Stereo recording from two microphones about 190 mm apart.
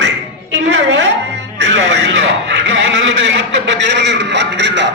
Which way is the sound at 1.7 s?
70° right (ahead or behind).